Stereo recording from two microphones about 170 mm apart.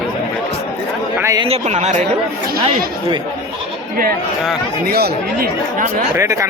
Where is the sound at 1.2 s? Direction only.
20° right (ahead or behind).